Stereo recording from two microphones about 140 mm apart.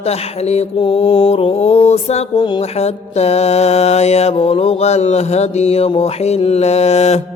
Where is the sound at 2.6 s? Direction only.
50° left (ahead or behind).